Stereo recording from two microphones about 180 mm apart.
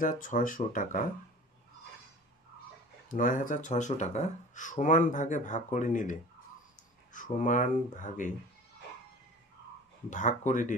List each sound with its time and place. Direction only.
0.0 s speech: 45° left (ahead or behind)
3.1 s speech: 50° left (ahead or behind)
10.0 s speech: 45° left (ahead or behind)